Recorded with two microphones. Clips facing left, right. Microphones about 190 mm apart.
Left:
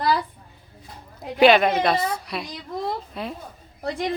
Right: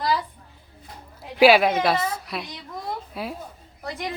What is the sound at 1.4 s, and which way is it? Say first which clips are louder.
A child's voice: even; 5° right (ahead or behind).